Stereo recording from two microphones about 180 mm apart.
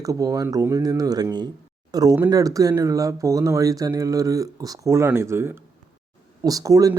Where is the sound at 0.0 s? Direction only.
20° right (ahead or behind).